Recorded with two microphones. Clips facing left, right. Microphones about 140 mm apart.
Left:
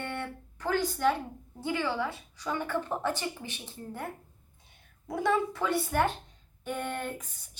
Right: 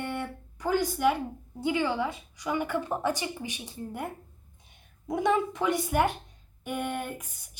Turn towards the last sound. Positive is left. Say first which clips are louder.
# even
turn(degrees=-10)  # may be behind; listen again after turning